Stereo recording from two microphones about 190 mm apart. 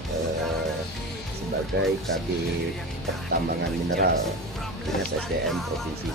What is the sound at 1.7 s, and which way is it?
Speech, 60° right (ahead or behind).